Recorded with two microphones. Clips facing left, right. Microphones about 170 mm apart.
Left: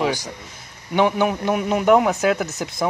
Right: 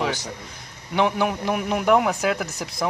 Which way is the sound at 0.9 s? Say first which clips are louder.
Left 3 dB; centre (ahead or behind).